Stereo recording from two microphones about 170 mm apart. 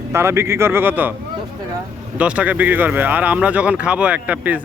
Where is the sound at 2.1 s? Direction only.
10° right (ahead or behind).